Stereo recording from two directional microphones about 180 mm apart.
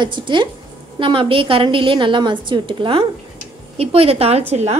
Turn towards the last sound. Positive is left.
turn(degrees=-35)  # may be behind; listen again after turning